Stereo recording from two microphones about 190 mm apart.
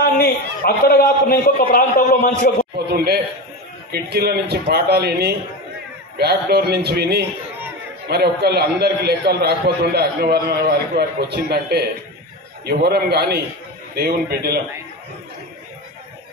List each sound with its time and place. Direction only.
0.0 s a man's voice: 50° left (ahead or behind)
3.9 s a man's voice: 55° right (ahead or behind)